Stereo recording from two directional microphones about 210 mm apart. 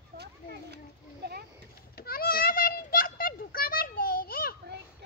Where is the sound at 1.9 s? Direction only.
45° left (ahead or behind).